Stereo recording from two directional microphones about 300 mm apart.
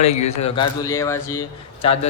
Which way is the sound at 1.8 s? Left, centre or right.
Centre.